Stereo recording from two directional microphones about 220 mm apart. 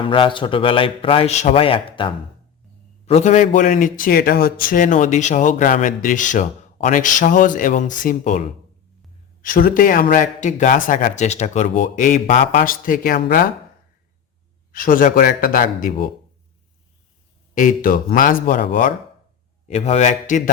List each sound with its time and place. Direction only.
0.1 s a man's voice: 20° left (ahead or behind); by 13.4 s 45° left (ahead or behind)
14.7 s a man's voice: 40° left (ahead or behind)
17.5 s a man's voice: 40° left (ahead or behind)
19.6 s a man's voice: 30° left (ahead or behind)